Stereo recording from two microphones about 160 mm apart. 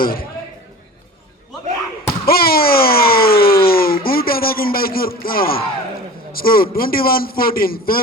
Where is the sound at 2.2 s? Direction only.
70° left (ahead or behind).